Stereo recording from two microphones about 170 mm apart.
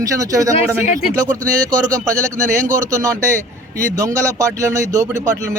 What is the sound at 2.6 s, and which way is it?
Speech, 45° right (ahead or behind).